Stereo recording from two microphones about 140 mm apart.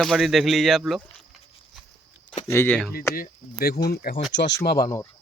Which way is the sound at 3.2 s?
90° left.